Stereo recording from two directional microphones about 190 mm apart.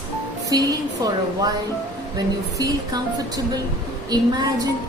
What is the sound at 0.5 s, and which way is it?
Speech, 20° right (ahead or behind).